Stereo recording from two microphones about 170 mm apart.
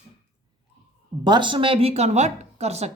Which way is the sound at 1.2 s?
25° right (ahead or behind).